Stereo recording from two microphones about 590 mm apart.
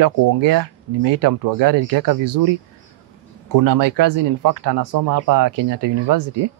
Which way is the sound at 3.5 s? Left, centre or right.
Right.